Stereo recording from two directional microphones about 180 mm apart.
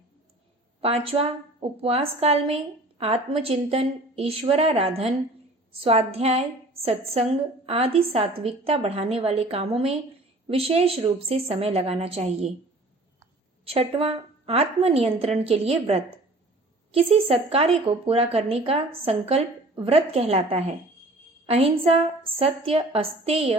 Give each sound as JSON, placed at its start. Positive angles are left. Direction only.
{"t": 0.8, "sound": "a woman's voice", "side_deg": -35}
{"t": 13.7, "sound": "a woman's voice", "side_deg": -35}